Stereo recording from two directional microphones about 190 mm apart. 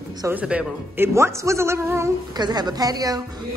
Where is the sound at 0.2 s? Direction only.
10° right (ahead or behind).